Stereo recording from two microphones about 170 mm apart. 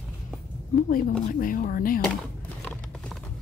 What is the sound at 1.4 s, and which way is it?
Speech, 55° left (ahead or behind).